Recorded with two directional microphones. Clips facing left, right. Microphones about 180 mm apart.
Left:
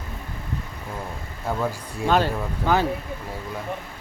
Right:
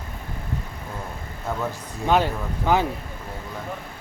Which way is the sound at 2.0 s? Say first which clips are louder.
Even; 15° right (ahead or behind).